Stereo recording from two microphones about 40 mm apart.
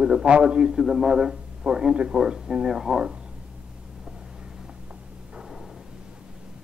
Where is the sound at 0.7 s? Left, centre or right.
Centre.